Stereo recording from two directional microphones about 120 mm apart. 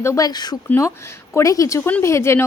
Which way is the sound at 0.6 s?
25° left (ahead or behind).